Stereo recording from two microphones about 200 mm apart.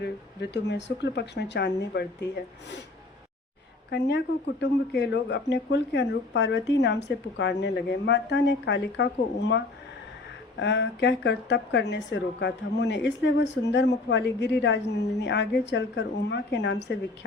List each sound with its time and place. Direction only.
0.5 s speech: 60° left (ahead or behind)
3.9 s speech: 55° left (ahead or behind)
10.6 s speech: 60° left (ahead or behind)